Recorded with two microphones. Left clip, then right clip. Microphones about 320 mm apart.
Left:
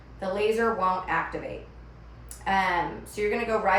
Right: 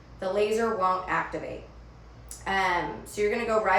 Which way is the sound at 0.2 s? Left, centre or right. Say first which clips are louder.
Even; centre.